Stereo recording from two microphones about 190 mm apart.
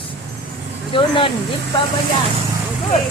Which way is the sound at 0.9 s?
25° left (ahead or behind).